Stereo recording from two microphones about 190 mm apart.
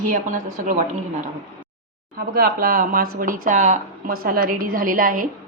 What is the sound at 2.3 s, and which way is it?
Speech, 50° right (ahead or behind).